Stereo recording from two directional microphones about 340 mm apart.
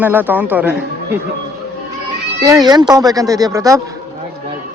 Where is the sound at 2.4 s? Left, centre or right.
Centre.